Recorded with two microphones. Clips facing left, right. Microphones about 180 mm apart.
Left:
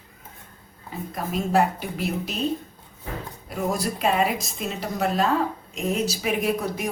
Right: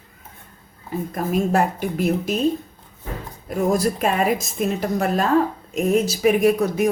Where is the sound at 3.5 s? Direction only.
45° right (ahead or behind).